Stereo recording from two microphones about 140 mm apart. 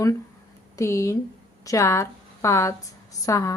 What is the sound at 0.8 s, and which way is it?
A woman's voice, 20° left (ahead or behind).